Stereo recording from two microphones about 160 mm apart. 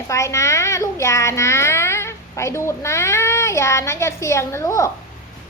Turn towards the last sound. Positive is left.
turn(degrees=20)  # may be behind; listen again after turning